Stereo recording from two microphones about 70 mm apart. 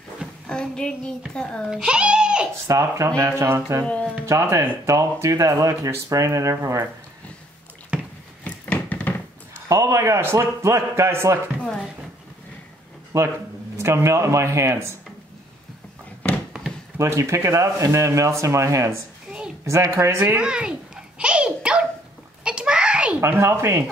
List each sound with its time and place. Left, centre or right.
0.5 s child singing: centre
1.3 s a child's voice: centre
1.7 s a child's voice: centre
2.7 s speech: right
3.8 s speech: centre
4.3 s speech: right
8.5 s a sound: left
9.7 s speech: right
13.1 s speech: right
16.2 s a sound: centre
17.0 s speech: right
20.3 s a child's voice: centre
22.4 s a sound: centre
23.2 s speech: right